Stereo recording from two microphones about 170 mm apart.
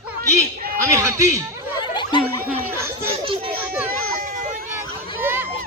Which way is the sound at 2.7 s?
15° right (ahead or behind).